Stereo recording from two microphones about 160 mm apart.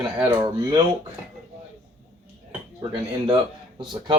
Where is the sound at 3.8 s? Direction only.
30° right (ahead or behind).